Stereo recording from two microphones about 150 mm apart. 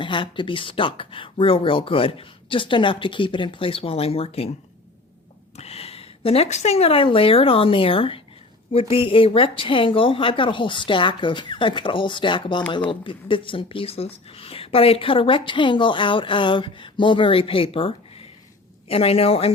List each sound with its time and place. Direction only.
0.0 s speech: 35° left (ahead or behind)
5.5 s speech: 45° left (ahead or behind)